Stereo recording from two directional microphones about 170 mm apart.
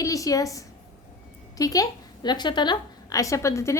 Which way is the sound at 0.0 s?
20° left (ahead or behind).